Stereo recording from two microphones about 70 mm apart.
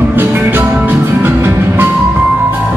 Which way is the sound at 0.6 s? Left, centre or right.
Right.